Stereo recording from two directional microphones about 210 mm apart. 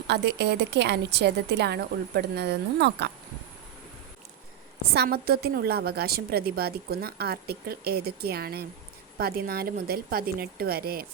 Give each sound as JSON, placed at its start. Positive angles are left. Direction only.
{"t": 0.1, "sound": "a woman's voice", "side_deg": -55}
{"t": 4.9, "sound": "a woman's voice", "side_deg": -45}